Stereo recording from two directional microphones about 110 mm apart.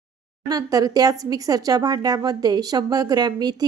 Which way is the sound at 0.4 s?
35° right (ahead or behind).